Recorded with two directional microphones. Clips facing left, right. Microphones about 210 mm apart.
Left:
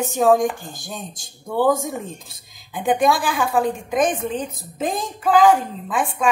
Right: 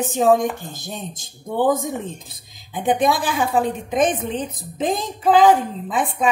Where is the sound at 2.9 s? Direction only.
20° right (ahead or behind).